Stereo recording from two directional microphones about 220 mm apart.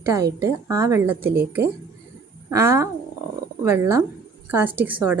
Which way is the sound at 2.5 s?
10° right (ahead or behind).